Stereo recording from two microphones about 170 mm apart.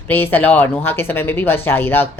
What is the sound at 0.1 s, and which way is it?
A woman's voice, 10° left (ahead or behind).